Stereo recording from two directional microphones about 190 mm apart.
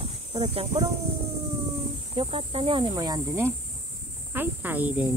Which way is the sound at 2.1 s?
30° right (ahead or behind).